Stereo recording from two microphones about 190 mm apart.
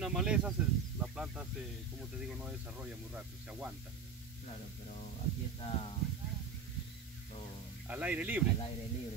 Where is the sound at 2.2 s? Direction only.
5° right (ahead or behind).